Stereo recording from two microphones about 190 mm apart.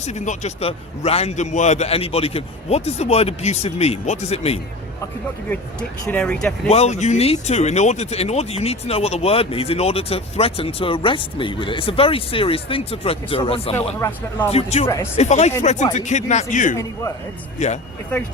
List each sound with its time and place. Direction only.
0.0 s speech: 35° left (ahead or behind)
6.1 s speech: 5° left (ahead or behind)
6.7 s speech: 35° left (ahead or behind)
13.7 s speech: 10° left (ahead or behind)
14.5 s speech: 35° left (ahead or behind)
14.8 s speech: 15° left (ahead or behind)
15.1 s speech: 35° left (ahead or behind)